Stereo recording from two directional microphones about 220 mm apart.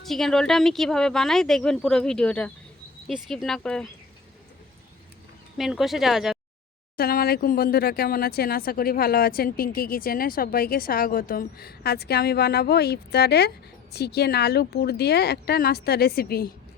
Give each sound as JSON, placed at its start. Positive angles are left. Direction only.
{"t": 0.0, "sound": "speech", "side_deg": 0}
{"t": 5.5, "sound": "speech", "side_deg": 0}
{"t": 6.9, "sound": "speech", "side_deg": 45}